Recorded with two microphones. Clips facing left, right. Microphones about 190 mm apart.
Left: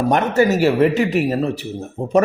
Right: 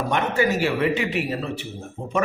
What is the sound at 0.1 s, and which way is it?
A man's voice, 40° left (ahead or behind).